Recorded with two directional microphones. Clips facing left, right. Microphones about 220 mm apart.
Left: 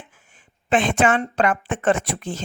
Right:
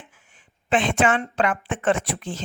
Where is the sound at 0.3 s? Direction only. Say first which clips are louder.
Left 2 dB; 45° left (ahead or behind).